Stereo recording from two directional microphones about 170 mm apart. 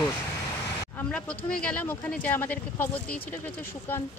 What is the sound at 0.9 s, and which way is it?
Speech, 5° left (ahead or behind).